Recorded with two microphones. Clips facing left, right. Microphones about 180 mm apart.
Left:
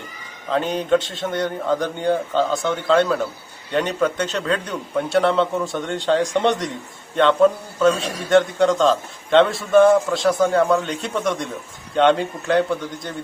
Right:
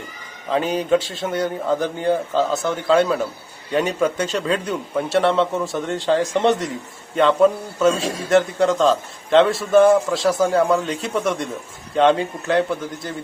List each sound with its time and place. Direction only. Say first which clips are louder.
0.5 s a man's voice: right 1 dB; 10° right (ahead or behind)